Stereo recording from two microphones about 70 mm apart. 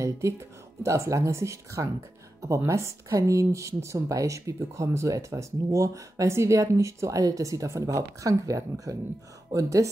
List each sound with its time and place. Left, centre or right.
0.8 s speech: right